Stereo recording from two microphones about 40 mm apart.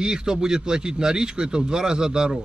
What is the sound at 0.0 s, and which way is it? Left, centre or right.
Speech, centre.